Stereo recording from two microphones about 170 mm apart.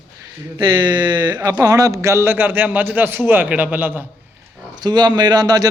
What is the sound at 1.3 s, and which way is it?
Speech, 20° right (ahead or behind).